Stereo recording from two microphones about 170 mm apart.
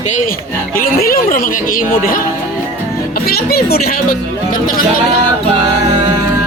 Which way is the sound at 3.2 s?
65° left (ahead or behind).